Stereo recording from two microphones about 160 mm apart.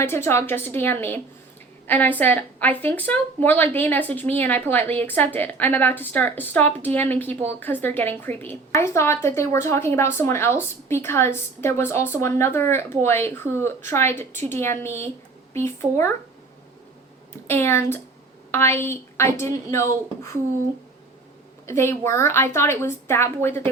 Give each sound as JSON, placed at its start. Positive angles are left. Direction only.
{"t": 0.0, "sound": "a woman's voice", "side_deg": 15}
{"t": 17.5, "sound": "a woman's voice", "side_deg": 15}
{"t": 21.7, "sound": "a woman's voice", "side_deg": 15}